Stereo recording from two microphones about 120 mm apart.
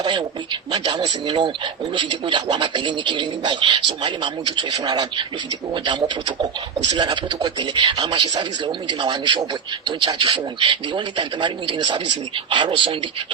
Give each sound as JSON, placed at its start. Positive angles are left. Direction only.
{"t": 0.0, "sound": "speech", "side_deg": -40}